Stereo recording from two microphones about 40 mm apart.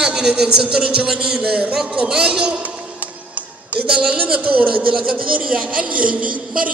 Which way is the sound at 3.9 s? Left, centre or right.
Right.